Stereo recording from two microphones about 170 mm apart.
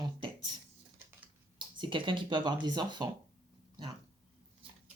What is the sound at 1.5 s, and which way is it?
Speech, 30° right (ahead or behind).